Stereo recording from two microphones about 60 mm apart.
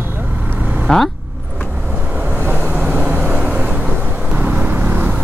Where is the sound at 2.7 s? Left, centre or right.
Centre.